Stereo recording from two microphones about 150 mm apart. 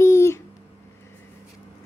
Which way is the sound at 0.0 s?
15° left (ahead or behind).